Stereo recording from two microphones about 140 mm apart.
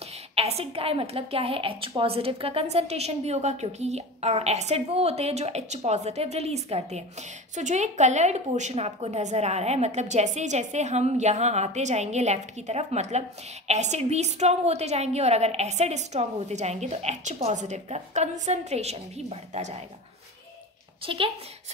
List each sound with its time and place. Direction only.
0.4 s a woman's voice: 45° right (ahead or behind)
21.0 s a woman's voice: 40° right (ahead or behind)